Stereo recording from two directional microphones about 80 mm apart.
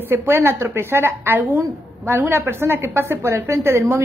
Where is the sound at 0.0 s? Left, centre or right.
Right.